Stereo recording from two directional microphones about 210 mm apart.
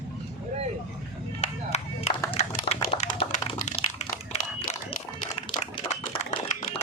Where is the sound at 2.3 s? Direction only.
30° left (ahead or behind).